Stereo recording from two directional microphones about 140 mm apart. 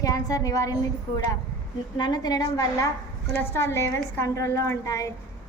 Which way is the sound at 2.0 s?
30° left (ahead or behind).